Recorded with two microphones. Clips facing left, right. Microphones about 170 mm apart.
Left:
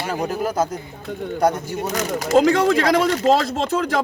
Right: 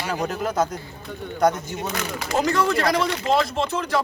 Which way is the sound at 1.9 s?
40° left (ahead or behind).